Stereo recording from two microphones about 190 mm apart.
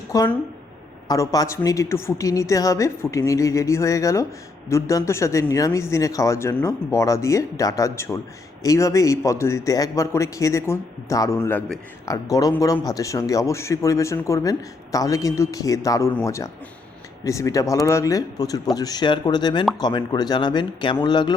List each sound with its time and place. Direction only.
0.1 s speech: 15° left (ahead or behind)